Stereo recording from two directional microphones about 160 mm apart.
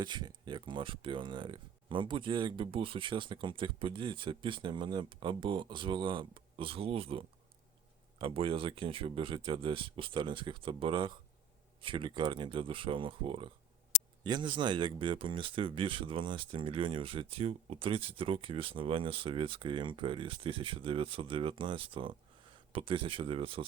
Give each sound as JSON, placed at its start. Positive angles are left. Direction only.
{"t": 0.0, "sound": "speech", "side_deg": -25}